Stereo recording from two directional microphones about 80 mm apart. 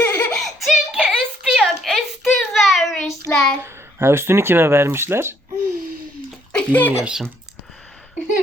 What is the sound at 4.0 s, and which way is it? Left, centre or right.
Speech, right.